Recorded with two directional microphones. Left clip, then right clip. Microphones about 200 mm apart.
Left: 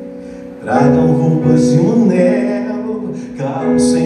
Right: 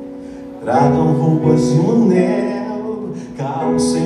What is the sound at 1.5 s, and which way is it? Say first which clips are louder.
Music: left 3 dB; 20° right (ahead or behind).